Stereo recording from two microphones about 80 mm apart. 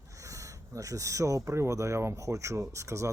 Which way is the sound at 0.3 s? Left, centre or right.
Right.